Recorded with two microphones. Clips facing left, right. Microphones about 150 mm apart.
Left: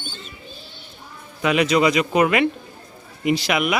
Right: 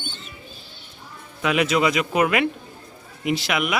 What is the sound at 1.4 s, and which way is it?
Speech, centre (ahead or behind).